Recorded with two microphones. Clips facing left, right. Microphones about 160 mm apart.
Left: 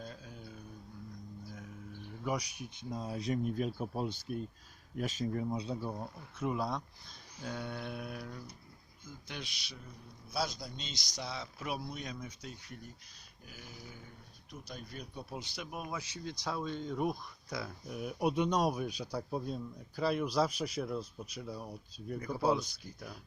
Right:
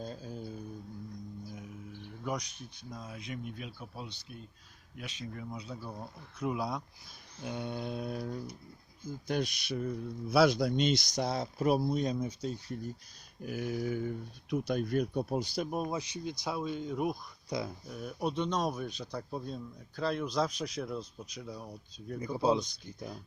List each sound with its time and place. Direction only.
0.0 s a sound: 35° right (ahead or behind)
1.5 s music: 15° right (ahead or behind)
2.2 s a man's voice: 5° left (ahead or behind)
2.7 s speech: 30° left (ahead or behind)
6.5 s speech: centre (ahead or behind)
7.4 s mantra: 20° right (ahead or behind)
9.0 s a man's voice: 40° right (ahead or behind)
13.4 s a sound: 60° right (ahead or behind); by 14.1 s 75° right (ahead or behind)
14.5 s a man's voice: 65° right (ahead or behind); by 16.0 s 35° right (ahead or behind)
16.0 s speech: 15° right (ahead or behind)
17.5 s mantra: 20° right (ahead or behind)
17.8 s a man's voice: 5° left (ahead or behind)
22.2 s mantra: 20° right (ahead or behind)